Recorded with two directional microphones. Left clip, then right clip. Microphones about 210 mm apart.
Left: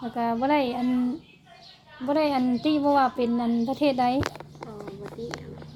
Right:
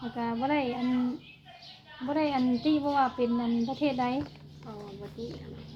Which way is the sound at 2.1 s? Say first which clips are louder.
Left 5 dB; 55° left (ahead or behind).